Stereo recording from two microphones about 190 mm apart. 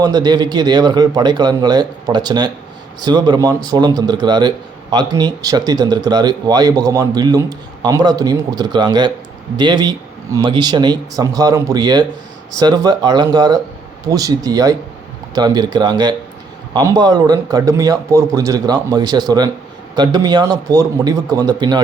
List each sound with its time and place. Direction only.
0.0 s speech: 20° right (ahead or behind)